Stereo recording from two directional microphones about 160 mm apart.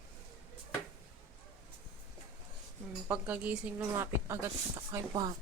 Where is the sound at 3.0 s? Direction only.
10° right (ahead or behind).